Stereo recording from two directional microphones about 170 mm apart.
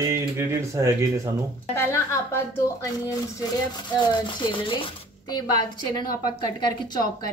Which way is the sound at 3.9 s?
25° left (ahead or behind).